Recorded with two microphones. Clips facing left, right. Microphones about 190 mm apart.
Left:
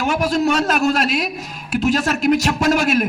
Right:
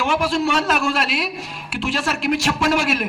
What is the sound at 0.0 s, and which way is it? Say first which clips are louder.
A man's voice: left 2 dB; 45° left (ahead or behind).